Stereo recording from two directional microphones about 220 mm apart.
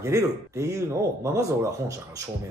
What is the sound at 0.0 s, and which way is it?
Speech, 15° right (ahead or behind).